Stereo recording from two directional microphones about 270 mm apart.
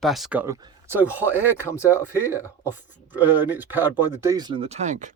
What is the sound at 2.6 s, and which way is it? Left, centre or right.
Speech, centre.